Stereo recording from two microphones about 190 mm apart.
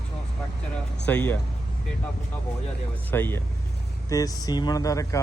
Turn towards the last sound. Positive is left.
turn(degrees=15)  # may be behind; listen again after turning